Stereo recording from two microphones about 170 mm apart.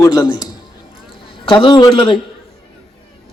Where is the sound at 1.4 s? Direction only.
25° left (ahead or behind).